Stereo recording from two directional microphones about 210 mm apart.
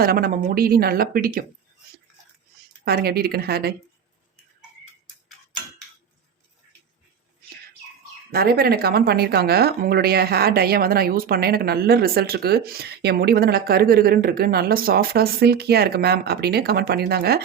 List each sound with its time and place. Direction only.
0.0 s a woman's voice: 45° right (ahead or behind)
2.8 s a woman's voice: 50° right (ahead or behind)
8.3 s a woman's voice: 45° right (ahead or behind)